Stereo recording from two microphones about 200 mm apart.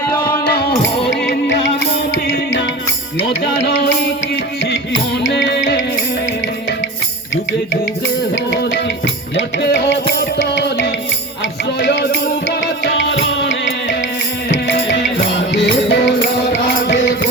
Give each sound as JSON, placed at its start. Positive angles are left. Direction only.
{"t": 2.1, "sound": "music", "side_deg": 75}
{"t": 3.6, "sound": "music", "side_deg": 60}
{"t": 5.2, "sound": "music", "side_deg": 60}
{"t": 8.4, "sound": "music", "side_deg": 65}
{"t": 15.5, "sound": "music", "side_deg": 60}